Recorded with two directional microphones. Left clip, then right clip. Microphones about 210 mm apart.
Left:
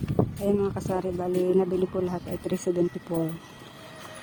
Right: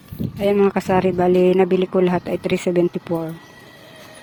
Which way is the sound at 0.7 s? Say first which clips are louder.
Right 11 dB; 35° right (ahead or behind).